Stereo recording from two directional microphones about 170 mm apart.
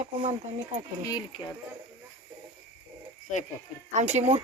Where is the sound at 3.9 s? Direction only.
40° right (ahead or behind).